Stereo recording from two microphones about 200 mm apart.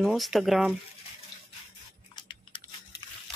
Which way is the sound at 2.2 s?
25° left (ahead or behind).